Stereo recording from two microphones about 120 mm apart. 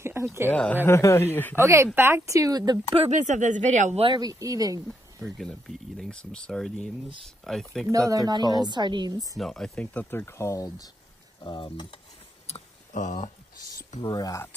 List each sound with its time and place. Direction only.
0.0 s a sound: 20° right (ahead or behind)
0.5 s speech: 10° left (ahead or behind)
0.8 s speech: 25° left (ahead or behind)
1.6 s speech: 25° right (ahead or behind)
3.1 s speech: 90° right
4.2 s speech: 30° right (ahead or behind)
4.8 s speech: centre (ahead or behind)
7.9 s a woman's voice: 30° right (ahead or behind)
9.4 s speech: 5° left (ahead or behind)
10.2 s speech: 25° left (ahead or behind)
11.4 s speech: 45° left (ahead or behind)
12.4 s a sound: 75° left (ahead or behind)
14.0 s speech: 35° left (ahead or behind)